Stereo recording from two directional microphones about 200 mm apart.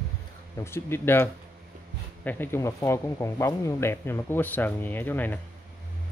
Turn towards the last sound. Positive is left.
turn(degrees=10)  # may be behind; listen again after turning